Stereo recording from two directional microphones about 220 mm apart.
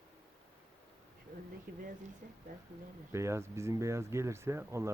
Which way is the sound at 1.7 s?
45° right (ahead or behind).